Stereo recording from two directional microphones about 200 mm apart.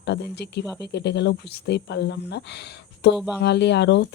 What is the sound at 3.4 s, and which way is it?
Speech, 60° left (ahead or behind).